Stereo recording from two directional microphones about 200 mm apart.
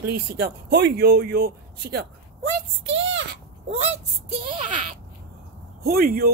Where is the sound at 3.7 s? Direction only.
35° right (ahead or behind).